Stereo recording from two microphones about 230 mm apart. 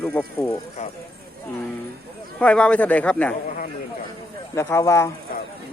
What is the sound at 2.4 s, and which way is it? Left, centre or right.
Speech, centre.